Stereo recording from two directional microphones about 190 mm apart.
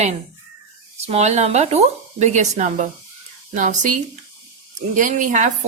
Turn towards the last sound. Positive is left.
turn(degrees=-40)  # may be behind; listen again after turning